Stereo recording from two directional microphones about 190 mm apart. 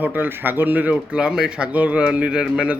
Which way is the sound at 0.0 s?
10° right (ahead or behind).